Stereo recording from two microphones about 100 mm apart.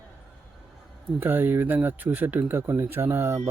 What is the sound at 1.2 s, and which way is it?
Speech, 20° right (ahead or behind).